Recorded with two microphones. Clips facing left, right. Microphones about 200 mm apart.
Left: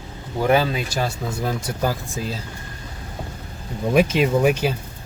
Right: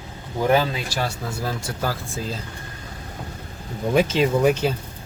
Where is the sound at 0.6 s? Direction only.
20° left (ahead or behind).